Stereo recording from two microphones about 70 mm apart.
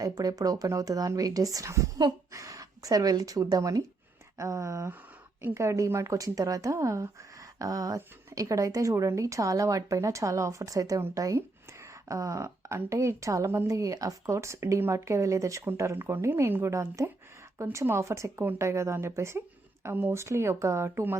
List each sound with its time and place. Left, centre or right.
0.0 s speech: right
4.4 s a woman's voice: right
7.6 s a woman's voice: right
11.3 s a sound: right
12.9 s a woman's voice: right
16.6 s a woman's voice: right
19.8 s speech: right
20.1 s speech: right